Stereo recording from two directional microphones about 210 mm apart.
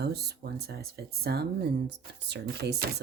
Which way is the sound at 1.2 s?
50° right (ahead or behind).